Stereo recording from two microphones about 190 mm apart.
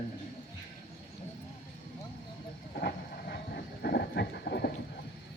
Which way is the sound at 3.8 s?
60° left (ahead or behind).